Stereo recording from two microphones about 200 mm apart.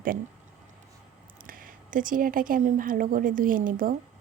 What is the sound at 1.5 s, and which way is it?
A woman's voice, 45° right (ahead or behind).